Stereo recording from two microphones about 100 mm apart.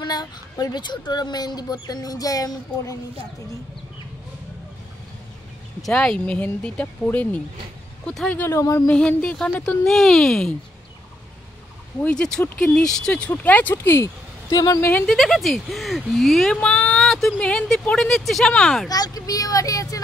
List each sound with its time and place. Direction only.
0.0 s speech: 45° left (ahead or behind)
5.8 s speech: 5° left (ahead or behind)
8.4 s speech: 30° left (ahead or behind)
8.8 s speech: 10° left (ahead or behind)
12.0 s speech: 10° left (ahead or behind)
14.5 s speech: 40° left (ahead or behind)
14.8 s speech: 15° left (ahead or behind)
15.0 s speech: centre (ahead or behind)
18.9 s speech: 40° left (ahead or behind)